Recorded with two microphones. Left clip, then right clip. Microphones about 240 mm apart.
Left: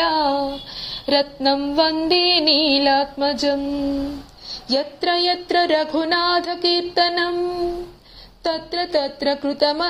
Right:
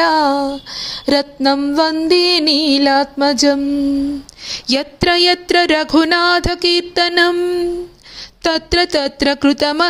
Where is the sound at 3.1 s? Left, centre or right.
Right.